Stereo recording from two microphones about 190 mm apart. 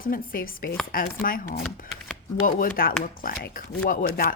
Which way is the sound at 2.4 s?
45° left (ahead or behind).